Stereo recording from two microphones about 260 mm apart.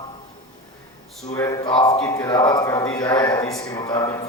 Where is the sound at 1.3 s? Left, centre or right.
Centre.